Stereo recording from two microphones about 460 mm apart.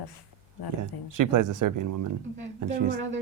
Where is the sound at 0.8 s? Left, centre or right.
Right.